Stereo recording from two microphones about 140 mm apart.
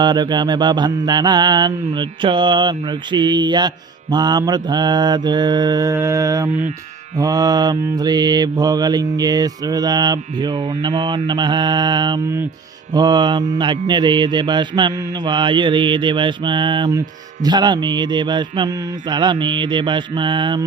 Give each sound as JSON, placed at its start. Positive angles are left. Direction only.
{"t": 0.0, "sound": "mantra", "side_deg": -30}